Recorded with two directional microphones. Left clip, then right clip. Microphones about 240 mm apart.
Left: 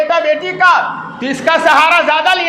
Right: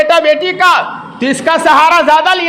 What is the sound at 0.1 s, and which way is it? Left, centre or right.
A man's voice, right.